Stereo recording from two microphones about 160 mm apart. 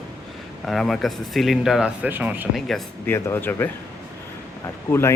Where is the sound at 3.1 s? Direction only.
15° left (ahead or behind).